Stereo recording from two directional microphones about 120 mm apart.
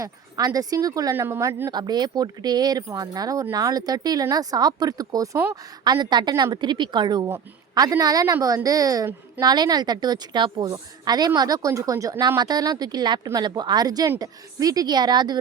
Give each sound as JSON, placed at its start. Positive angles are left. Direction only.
{"t": 0.0, "sound": "speech", "side_deg": -30}
{"t": 1.7, "sound": "speech", "side_deg": -35}
{"t": 7.3, "sound": "speech", "side_deg": -25}